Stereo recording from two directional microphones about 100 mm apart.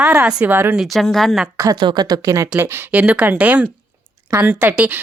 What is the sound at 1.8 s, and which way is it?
Speech, 45° right (ahead or behind).